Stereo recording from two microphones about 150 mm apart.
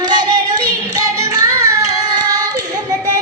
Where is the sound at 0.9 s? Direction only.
25° right (ahead or behind).